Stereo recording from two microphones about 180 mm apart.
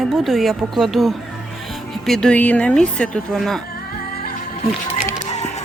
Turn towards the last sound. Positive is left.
turn(degrees=40)  # may be behind; listen again after turning